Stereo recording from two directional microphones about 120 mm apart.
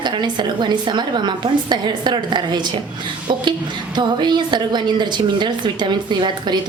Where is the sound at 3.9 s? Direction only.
40° right (ahead or behind).